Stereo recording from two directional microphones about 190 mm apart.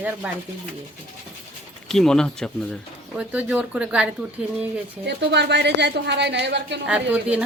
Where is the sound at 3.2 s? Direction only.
5° right (ahead or behind).